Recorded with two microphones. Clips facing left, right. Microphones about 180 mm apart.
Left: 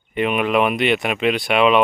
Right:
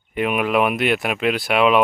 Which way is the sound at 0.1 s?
5° right (ahead or behind).